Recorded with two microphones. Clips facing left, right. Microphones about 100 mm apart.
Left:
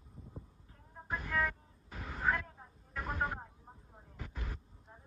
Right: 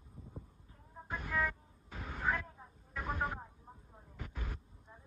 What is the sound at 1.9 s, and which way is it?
Vehicle, 5° left (ahead or behind).